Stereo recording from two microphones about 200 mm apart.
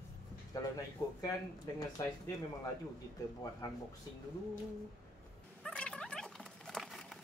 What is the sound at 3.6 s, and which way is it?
Speech, 15° left (ahead or behind).